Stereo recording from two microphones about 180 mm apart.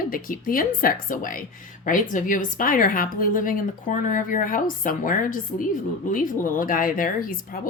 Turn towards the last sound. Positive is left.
turn(degrees=50)  # may be behind; listen again after turning